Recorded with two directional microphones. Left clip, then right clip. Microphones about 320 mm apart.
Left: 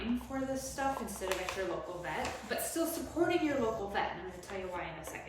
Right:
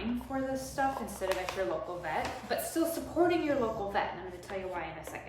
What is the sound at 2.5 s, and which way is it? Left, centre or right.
A woman's voice, centre.